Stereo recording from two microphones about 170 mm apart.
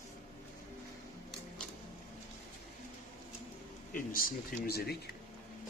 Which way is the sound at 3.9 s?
55° left (ahead or behind).